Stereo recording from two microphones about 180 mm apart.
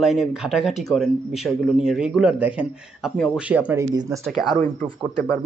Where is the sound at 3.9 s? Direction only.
20° right (ahead or behind).